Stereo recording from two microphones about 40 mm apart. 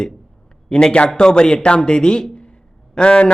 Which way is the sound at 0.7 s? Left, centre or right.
Left.